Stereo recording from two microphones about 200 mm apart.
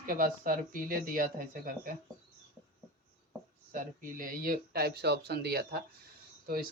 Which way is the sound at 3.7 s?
45° right (ahead or behind).